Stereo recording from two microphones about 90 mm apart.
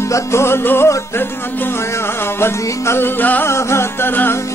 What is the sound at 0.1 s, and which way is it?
Music, 30° left (ahead or behind).